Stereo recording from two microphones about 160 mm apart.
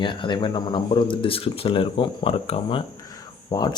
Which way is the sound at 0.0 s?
30° left (ahead or behind).